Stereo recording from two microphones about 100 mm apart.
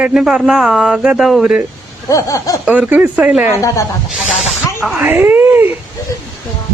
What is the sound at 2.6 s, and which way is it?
Speech, 15° right (ahead or behind).